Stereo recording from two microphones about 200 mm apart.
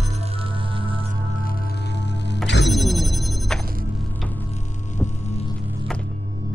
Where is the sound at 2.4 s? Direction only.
60° left (ahead or behind).